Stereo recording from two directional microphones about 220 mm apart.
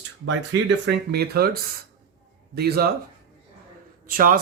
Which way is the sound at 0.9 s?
45° right (ahead or behind).